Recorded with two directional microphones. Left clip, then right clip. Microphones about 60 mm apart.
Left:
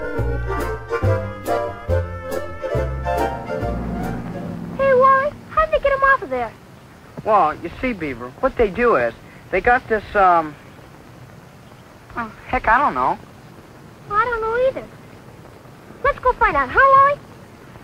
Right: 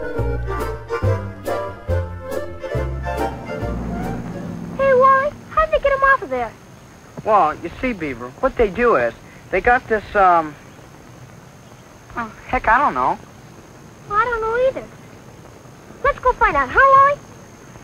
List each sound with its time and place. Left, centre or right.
0.0 s music: centre
4.7 s a sound: right
7.2 s speech: right
12.1 s speech: right
14.0 s a sound: right
16.0 s speech: right